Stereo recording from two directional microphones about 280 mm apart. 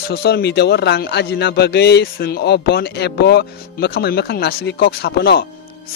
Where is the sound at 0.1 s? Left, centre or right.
Left.